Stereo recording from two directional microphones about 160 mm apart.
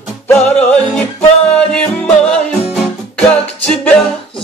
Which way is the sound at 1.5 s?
5° left (ahead or behind).